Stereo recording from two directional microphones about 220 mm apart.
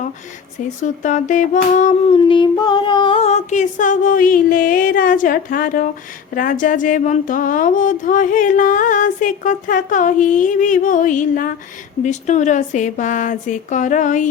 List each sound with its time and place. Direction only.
0.8 s speech: 35° left (ahead or behind)